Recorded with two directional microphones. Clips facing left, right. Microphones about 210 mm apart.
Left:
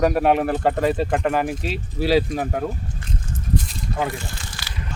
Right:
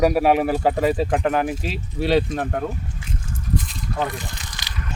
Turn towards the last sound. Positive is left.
turn(degrees=-20)  # may be behind; listen again after turning